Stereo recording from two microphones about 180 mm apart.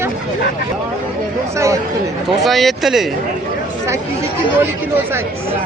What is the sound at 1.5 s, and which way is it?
Speech, 15° right (ahead or behind).